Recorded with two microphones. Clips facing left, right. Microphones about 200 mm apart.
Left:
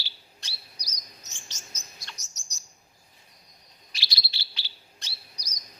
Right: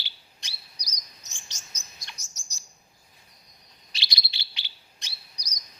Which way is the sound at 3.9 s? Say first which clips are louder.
Right 1 dB; 20° right (ahead or behind).